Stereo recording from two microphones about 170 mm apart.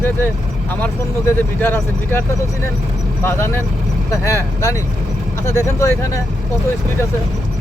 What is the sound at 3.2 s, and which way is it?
Speech, 15° left (ahead or behind).